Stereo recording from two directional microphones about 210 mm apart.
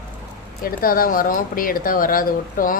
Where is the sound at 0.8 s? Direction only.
45° left (ahead or behind).